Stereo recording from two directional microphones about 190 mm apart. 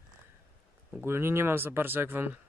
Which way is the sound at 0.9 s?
10° right (ahead or behind).